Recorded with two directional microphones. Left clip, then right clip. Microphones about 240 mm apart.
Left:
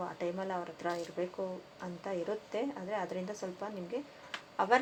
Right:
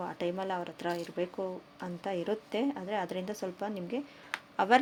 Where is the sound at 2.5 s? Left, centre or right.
Right.